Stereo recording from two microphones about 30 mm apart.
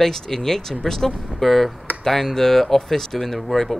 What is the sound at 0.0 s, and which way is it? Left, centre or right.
Speech, centre.